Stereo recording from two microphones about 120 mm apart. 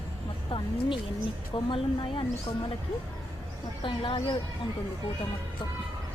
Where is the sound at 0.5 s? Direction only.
45° left (ahead or behind).